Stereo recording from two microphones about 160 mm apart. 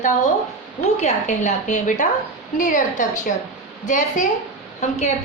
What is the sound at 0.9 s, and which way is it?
A woman's voice, 45° left (ahead or behind).